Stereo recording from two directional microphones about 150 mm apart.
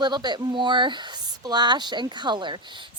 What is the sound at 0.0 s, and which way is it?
Speech, 30° right (ahead or behind).